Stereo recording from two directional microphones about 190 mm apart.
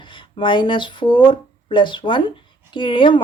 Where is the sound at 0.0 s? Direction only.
25° left (ahead or behind).